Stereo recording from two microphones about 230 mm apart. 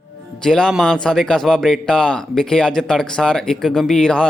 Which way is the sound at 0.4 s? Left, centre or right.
Centre.